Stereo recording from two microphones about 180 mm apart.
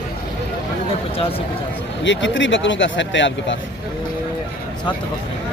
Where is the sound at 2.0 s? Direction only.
90° left.